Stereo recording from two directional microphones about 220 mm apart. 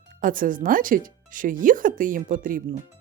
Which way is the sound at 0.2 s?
40° right (ahead or behind).